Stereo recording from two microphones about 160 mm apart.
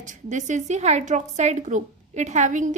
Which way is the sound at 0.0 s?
50° right (ahead or behind).